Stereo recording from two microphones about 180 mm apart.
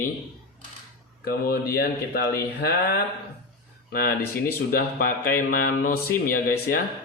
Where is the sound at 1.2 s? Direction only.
55° left (ahead or behind).